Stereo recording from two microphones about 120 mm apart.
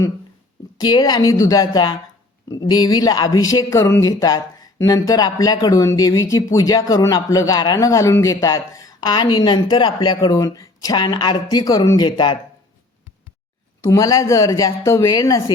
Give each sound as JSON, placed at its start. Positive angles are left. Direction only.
{"t": 0.8, "sound": "speech", "side_deg": 35}
{"t": 13.8, "sound": "speech", "side_deg": 30}